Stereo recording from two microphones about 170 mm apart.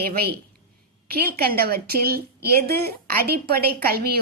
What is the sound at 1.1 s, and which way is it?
A woman's voice, 65° right (ahead or behind).